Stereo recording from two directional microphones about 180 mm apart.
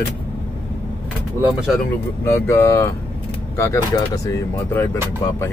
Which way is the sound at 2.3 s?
15° left (ahead or behind).